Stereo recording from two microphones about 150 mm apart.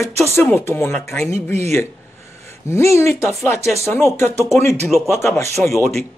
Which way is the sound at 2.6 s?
20° left (ahead or behind).